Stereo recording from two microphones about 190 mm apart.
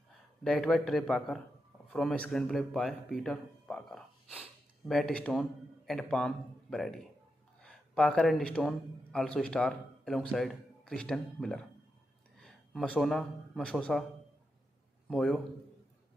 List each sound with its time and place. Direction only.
0.4 s a man's voice: centre (ahead or behind)
15.0 s speech: centre (ahead or behind)